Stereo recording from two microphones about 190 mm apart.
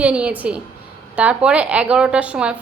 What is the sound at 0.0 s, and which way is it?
Speech, 5° right (ahead or behind).